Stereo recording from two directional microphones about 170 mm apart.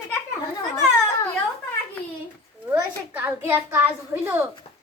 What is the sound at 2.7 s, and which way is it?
A child's voice, 10° right (ahead or behind).